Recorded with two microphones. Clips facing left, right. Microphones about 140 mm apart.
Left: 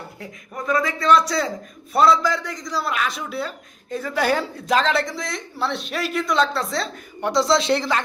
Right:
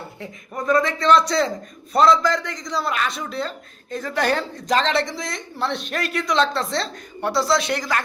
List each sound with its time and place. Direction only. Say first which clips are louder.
0.2 s speech: right 3 dB; centre (ahead or behind)
7.2 s speech: left 1 dB; 20° left (ahead or behind)